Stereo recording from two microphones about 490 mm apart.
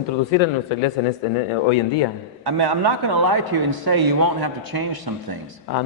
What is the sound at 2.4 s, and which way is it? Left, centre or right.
A man's voice, right.